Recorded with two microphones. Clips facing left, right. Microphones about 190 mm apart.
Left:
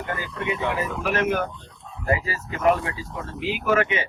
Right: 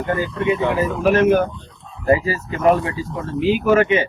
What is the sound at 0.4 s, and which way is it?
Speech, 30° right (ahead or behind).